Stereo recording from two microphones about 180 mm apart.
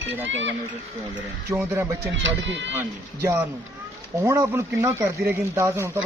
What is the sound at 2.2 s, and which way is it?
Speech, 85° right.